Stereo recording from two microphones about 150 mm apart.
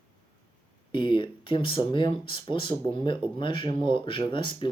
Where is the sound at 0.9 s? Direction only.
35° left (ahead or behind).